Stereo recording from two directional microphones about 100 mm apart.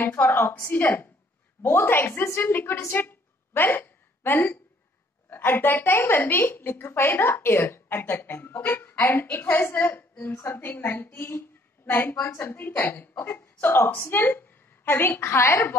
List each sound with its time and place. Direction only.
0.0 s a woman's voice: 20° left (ahead or behind)